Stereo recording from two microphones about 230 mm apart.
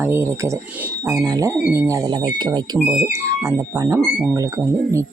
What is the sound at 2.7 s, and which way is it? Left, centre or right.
Speech, centre.